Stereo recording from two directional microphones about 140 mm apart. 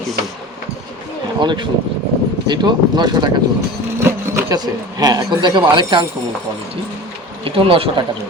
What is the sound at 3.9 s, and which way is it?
Speech, 20° right (ahead or behind).